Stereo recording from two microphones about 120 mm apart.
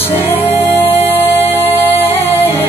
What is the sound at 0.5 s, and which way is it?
Music, 20° left (ahead or behind).